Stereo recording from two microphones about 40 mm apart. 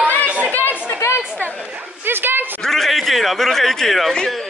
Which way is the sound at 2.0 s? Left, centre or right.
Right.